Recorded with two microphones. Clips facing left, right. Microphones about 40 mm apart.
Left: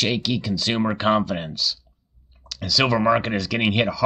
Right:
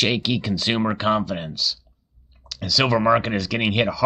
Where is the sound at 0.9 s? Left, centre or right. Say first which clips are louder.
Left 1 dB; centre.